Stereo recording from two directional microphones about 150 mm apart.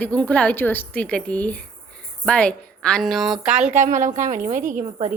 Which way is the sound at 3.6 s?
55° right (ahead or behind).